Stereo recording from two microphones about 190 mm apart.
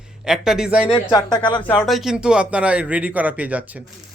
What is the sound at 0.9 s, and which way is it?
Speech, 25° left (ahead or behind).